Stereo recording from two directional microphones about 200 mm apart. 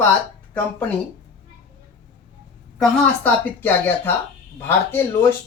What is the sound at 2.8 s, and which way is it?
Speech, 5° left (ahead or behind).